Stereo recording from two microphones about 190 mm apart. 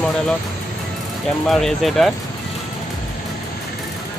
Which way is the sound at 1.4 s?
Centre (ahead or behind).